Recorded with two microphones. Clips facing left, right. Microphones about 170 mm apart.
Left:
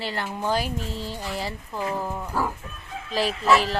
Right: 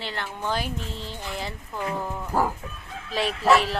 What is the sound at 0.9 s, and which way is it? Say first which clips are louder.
Speech: left 4 dB; 40° left (ahead or behind).